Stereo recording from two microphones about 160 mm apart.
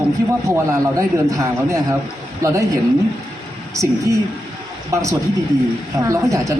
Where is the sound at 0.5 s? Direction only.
20° right (ahead or behind).